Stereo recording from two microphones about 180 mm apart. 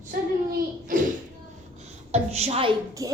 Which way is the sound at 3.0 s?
20° right (ahead or behind).